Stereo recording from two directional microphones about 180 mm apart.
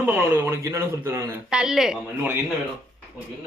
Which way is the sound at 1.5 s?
5° right (ahead or behind).